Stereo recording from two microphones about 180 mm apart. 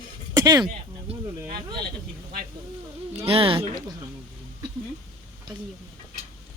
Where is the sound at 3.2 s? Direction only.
30° right (ahead or behind).